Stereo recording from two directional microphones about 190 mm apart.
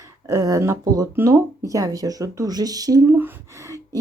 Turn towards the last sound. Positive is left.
turn(degrees=-15)  # may be behind; listen again after turning